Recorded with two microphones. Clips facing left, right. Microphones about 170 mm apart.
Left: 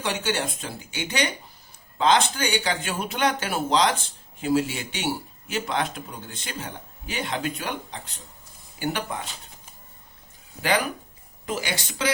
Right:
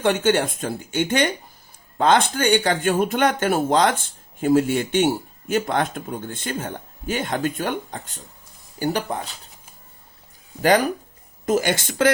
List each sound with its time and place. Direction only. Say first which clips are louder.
0.0 s speech: right 8 dB; 50° right (ahead or behind)
10.6 s speech: right 7 dB; 40° right (ahead or behind)